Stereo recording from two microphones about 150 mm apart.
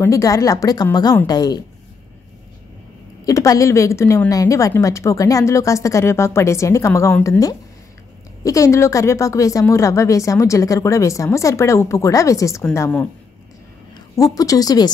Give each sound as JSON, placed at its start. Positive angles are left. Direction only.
{"t": 0.0, "sound": "a woman's voice", "side_deg": 20}
{"t": 3.3, "sound": "a woman's voice", "side_deg": 20}